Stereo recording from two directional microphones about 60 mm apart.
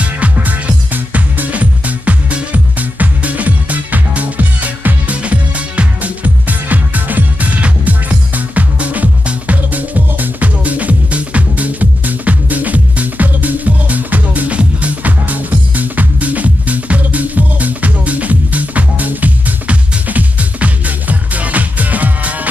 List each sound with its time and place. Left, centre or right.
0.0 s music: right